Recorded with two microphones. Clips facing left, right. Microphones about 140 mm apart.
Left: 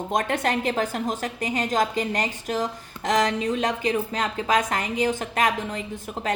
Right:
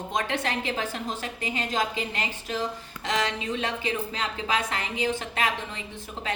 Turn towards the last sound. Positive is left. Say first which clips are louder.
# left 4 dB
turn(degrees=45)  # may be behind; listen again after turning